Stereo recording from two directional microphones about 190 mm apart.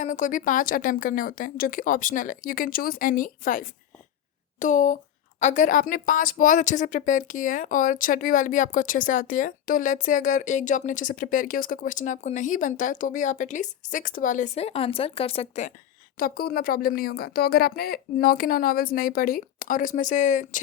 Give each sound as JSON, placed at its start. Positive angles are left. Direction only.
{"t": 0.0, "sound": "speech", "side_deg": 40}
{"t": 16.1, "sound": "speech", "side_deg": 50}